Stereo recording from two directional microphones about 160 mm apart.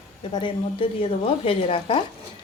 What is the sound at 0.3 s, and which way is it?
Stir, 30° left (ahead or behind).